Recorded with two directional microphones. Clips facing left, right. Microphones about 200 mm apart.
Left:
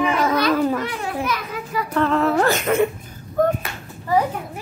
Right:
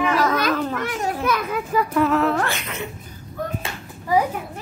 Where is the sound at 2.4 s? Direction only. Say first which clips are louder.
Left 10 dB; 45° left (ahead or behind).